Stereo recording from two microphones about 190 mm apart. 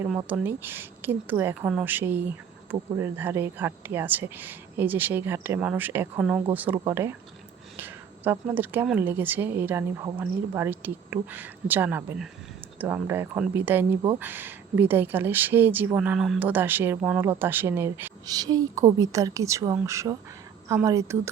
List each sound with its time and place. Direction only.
0.3 s speech: 10° right (ahead or behind)